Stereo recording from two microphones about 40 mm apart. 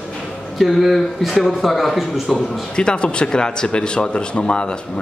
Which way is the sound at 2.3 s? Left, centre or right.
Left.